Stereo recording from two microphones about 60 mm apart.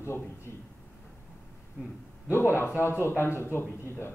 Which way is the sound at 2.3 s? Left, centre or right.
Left.